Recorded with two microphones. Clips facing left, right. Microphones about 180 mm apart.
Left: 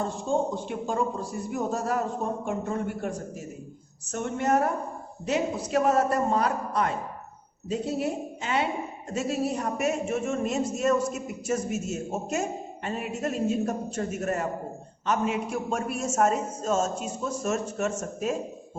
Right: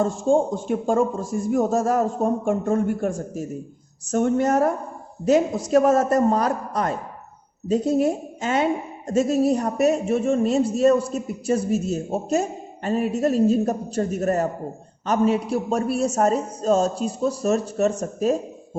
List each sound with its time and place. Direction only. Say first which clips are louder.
0.0 s a man's voice: right 7 dB; 45° right (ahead or behind)